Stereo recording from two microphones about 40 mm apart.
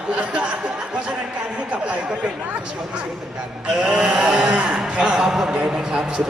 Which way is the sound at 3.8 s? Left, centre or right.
Right.